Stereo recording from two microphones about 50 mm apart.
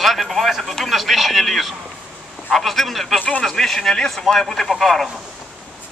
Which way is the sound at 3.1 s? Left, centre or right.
Left.